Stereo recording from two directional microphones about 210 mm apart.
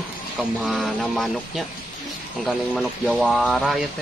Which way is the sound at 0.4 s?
5° right (ahead or behind).